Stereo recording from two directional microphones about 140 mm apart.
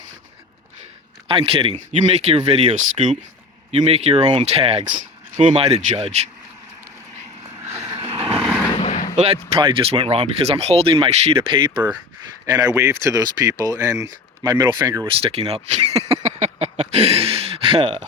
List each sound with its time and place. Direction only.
1.3 s speech: 40° right (ahead or behind)
2.7 s speech: 60° right (ahead or behind)
3.7 s speech: 45° right (ahead or behind)
4.1 s speech: 35° right (ahead or behind)
4.4 s speech: 45° right (ahead or behind)
7.6 s vehicle: 20° right (ahead or behind)
7.9 s vehicle: 45° right (ahead or behind)
8.4 s vehicle: 5° right (ahead or behind)
8.7 s vehicle: 55° left (ahead or behind)
9.1 s speech: 50° right (ahead or behind)
9.6 s speech: 35° right (ahead or behind)
15.0 s speech: 40° right (ahead or behind)